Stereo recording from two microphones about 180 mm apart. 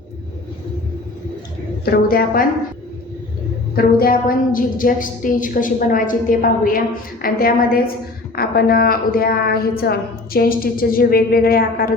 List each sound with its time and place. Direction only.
1.8 s a woman's voice: 60° left (ahead or behind)
3.8 s a woman's voice: 55° left (ahead or behind)